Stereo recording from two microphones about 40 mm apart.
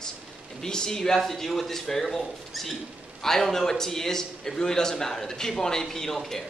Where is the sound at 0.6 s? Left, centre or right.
Centre.